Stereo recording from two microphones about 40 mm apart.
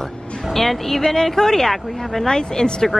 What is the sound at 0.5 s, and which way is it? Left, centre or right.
Speech, centre.